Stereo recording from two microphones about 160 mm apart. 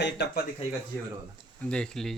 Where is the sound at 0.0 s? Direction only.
90° left.